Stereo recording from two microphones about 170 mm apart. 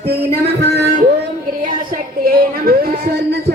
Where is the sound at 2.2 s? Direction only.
60° right (ahead or behind).